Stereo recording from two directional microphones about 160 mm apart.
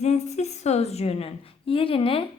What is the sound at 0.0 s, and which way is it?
A woman's voice, 45° left (ahead or behind).